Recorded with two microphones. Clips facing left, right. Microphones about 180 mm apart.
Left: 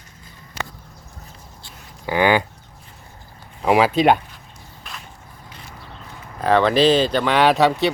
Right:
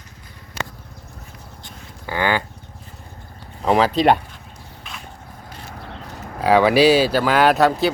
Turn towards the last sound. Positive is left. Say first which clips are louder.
# even
turn(degrees=0)  # may be behind; listen again after turning